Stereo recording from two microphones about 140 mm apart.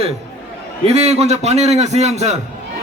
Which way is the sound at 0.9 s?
50° right (ahead or behind).